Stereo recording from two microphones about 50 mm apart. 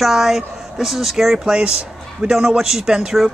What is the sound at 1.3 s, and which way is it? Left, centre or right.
A man's voice, centre.